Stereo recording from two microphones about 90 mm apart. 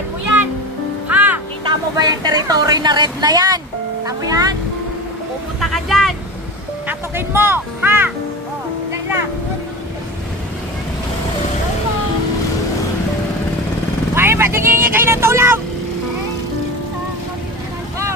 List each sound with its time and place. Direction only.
1.0 s music: 15° right (ahead or behind)
1.6 s speech: 55° right (ahead or behind)
5.6 s speech: centre (ahead or behind)
6.9 s speech: 25° right (ahead or behind)
14.1 s vehicle: 25° right (ahead or behind)